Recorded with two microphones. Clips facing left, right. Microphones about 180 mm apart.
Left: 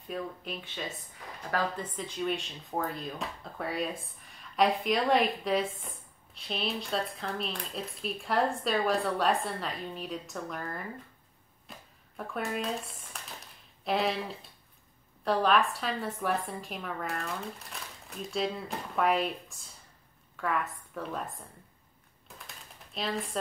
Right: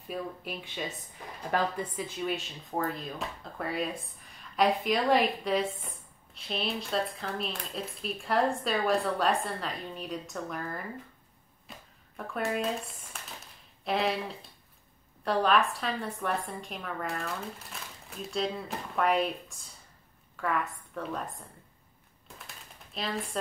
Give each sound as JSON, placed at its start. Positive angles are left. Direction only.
{"t": 0.1, "sound": "speech", "side_deg": -5}
{"t": 1.5, "sound": "a woman's voice", "side_deg": -20}
{"t": 2.0, "sound": "speech", "side_deg": -5}
{"t": 11.7, "sound": "a sound", "side_deg": 0}
{"t": 12.2, "sound": "speech", "side_deg": 0}
{"t": 22.9, "sound": "speech", "side_deg": 0}